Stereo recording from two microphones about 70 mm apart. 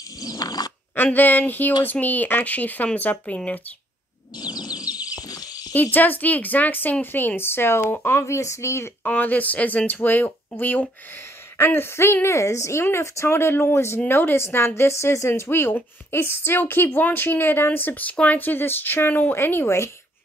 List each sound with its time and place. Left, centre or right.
0.2 s a sound: left
0.9 s a woman's voice: left
4.4 s a sound: left
5.2 s cricket: left
5.7 s a woman's voice: left
9.0 s a woman's voice: left